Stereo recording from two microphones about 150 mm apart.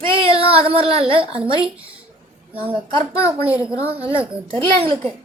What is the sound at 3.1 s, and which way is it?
Child singing, 40° right (ahead or behind).